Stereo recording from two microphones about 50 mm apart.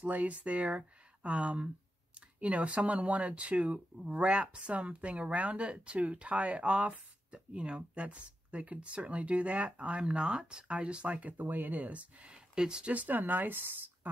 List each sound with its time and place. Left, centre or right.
0.0 s speech: right; by 12.9 s centre
12.9 s speech: right